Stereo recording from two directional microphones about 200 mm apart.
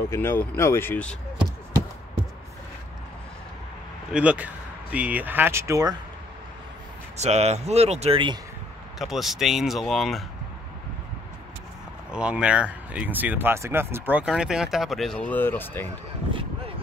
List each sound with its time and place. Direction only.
0.1 s speech: 10° left (ahead or behind)
4.1 s speech: 5° right (ahead or behind)
7.2 s speech: 35° right (ahead or behind)
8.9 s speech: centre (ahead or behind)
12.1 s speech: 5° right (ahead or behind)